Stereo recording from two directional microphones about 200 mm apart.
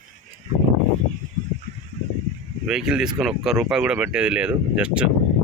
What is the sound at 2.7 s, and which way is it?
Speech, 5° right (ahead or behind).